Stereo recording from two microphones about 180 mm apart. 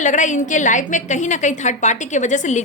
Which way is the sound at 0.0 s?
45° left (ahead or behind).